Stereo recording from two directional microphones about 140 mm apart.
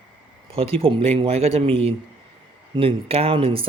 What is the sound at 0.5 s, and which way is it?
Speech, 45° right (ahead or behind).